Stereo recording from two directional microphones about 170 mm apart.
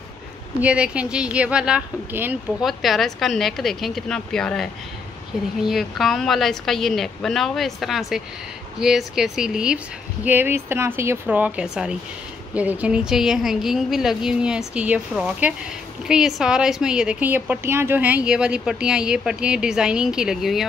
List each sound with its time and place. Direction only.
0.6 s a woman's voice: 5° right (ahead or behind)